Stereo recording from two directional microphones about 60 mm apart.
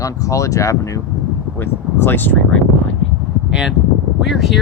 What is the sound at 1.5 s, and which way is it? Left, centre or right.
Speech, left.